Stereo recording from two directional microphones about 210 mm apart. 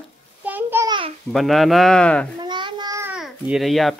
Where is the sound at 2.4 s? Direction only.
20° right (ahead or behind).